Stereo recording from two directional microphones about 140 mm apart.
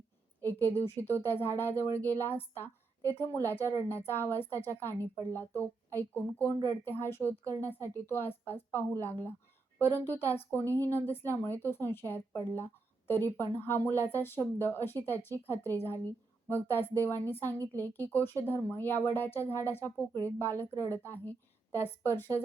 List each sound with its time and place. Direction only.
0.4 s a woman's voice: 15° left (ahead or behind)
1.8 s speech: 20° right (ahead or behind)
2.0 s a woman's voice: 15° left (ahead or behind)